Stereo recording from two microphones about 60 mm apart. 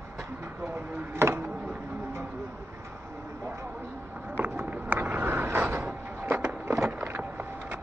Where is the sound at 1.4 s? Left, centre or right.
Right.